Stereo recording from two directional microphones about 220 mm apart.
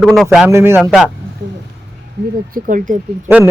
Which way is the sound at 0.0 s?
Centre (ahead or behind).